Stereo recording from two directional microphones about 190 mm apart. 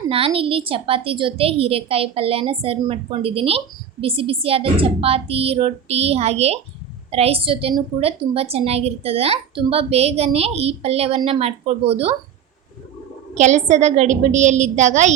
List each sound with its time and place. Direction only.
0.1 s a woman's voice: 30° right (ahead or behind)
13.3 s a woman's voice: 40° right (ahead or behind)